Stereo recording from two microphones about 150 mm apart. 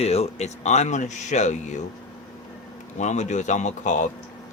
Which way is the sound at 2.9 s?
50° left (ahead or behind).